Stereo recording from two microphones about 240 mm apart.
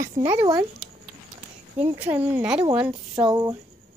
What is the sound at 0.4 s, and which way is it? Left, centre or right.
Speech, centre.